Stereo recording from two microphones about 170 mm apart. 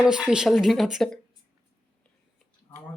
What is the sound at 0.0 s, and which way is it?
A woman's voice, 5° right (ahead or behind).